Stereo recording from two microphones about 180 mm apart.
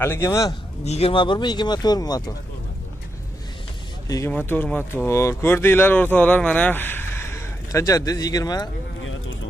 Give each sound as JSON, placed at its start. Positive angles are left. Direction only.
{"t": 0.0, "sound": "a man's voice", "side_deg": 15}
{"t": 0.8, "sound": "speech", "side_deg": 35}
{"t": 4.3, "sound": "a man's voice", "side_deg": 10}